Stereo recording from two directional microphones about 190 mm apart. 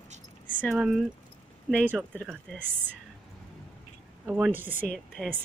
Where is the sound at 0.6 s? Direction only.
Centre (ahead or behind).